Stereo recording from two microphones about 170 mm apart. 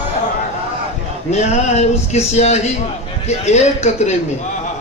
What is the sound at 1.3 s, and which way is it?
Speech, 40° left (ahead or behind).